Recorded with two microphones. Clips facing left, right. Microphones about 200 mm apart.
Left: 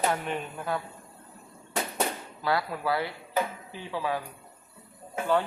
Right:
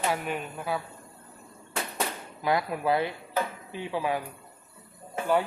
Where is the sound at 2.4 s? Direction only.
15° right (ahead or behind).